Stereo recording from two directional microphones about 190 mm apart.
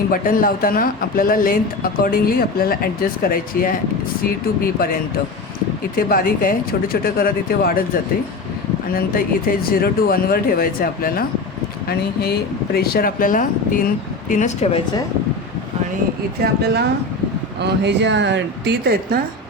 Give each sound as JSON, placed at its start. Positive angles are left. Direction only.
{"t": 0.1, "sound": "speech", "side_deg": 50}
{"t": 6.0, "sound": "speech", "side_deg": 50}
{"t": 8.9, "sound": "speech", "side_deg": 50}
{"t": 16.4, "sound": "speech", "side_deg": -60}